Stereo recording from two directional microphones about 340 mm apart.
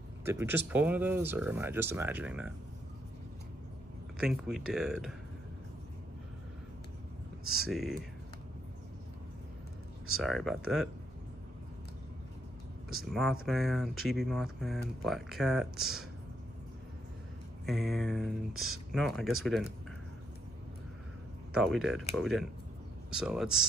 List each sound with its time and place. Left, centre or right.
0.2 s speech: centre
4.2 s speech: centre
7.4 s speech: right
7.7 s speech: centre
10.2 s speech: centre
13.1 s speech: centre
17.6 s speech: centre
18.5 s speech: right
18.9 s speech: centre
21.5 s speech: centre